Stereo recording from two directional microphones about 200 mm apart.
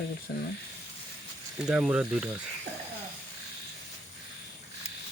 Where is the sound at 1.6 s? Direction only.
5° right (ahead or behind).